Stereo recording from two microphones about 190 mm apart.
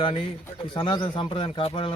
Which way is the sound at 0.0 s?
25° left (ahead or behind).